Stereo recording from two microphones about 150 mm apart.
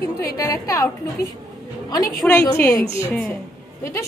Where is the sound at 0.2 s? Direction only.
20° left (ahead or behind).